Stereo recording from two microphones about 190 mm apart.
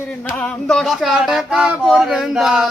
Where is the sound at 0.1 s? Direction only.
5° left (ahead or behind).